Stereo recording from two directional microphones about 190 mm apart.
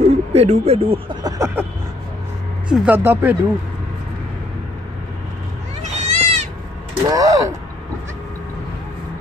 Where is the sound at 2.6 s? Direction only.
5° right (ahead or behind).